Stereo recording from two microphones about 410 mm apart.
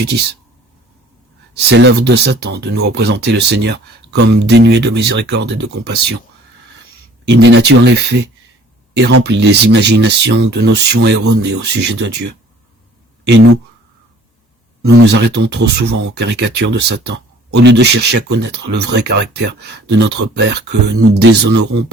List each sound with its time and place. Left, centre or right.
1.5 s speech: right
7.3 s speech: right
14.8 s speech: right